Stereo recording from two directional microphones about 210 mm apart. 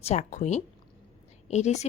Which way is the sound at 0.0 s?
35° left (ahead or behind).